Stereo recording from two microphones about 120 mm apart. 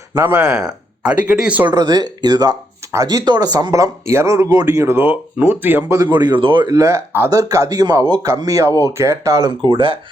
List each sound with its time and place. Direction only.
0.3 s speech: 5° right (ahead or behind)
1.6 s speech: 35° right (ahead or behind); by 6.0 s 15° right (ahead or behind)
6.0 s speech: 35° right (ahead or behind)
9.6 s speech: 45° right (ahead or behind)